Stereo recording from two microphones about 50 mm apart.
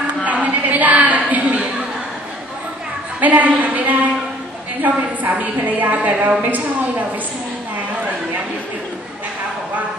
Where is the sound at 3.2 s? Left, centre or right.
Right.